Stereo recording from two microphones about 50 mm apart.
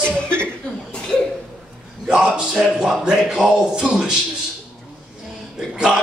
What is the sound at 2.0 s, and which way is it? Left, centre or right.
A man's voice, centre.